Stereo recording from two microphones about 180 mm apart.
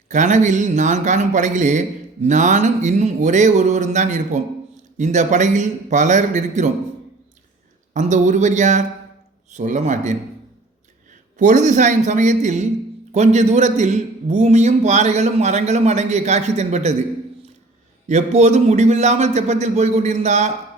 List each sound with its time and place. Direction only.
0.1 s a man's voice: 45° right (ahead or behind)
7.9 s a man's voice: 45° right (ahead or behind)
11.3 s a man's voice: 45° right (ahead or behind)
18.1 s a man's voice: 40° right (ahead or behind)